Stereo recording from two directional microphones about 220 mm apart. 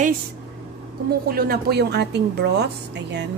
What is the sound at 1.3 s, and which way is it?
A woman's voice, 45° right (ahead or behind).